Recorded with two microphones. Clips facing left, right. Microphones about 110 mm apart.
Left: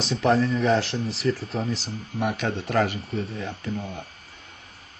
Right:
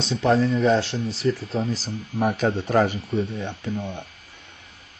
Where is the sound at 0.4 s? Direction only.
30° right (ahead or behind).